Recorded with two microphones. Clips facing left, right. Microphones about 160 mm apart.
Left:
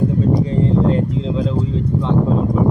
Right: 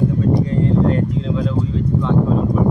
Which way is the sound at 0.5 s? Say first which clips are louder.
Even; 25° left (ahead or behind).